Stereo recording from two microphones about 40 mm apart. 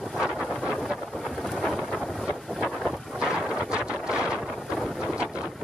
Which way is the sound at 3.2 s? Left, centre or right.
Right.